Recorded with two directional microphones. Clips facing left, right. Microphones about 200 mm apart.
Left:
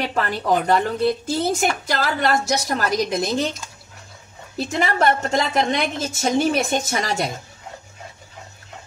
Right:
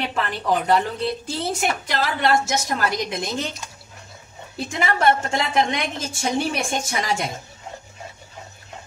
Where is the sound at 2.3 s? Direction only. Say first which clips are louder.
Right 2 dB; 40° left (ahead or behind).